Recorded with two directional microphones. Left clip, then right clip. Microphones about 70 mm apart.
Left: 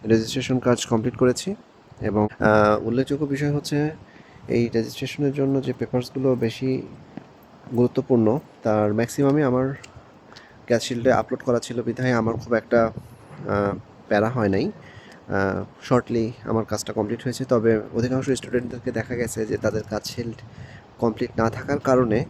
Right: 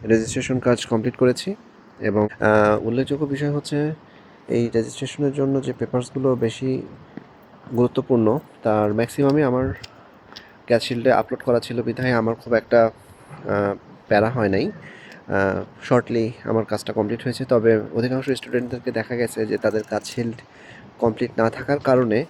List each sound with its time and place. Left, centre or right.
0.1 s speech: centre
2.0 s speech: left
2.9 s speech: left
3.3 s speech: left
4.4 s speech: left
7.8 s speech: left
12.5 s speech: left
17.9 s speech: left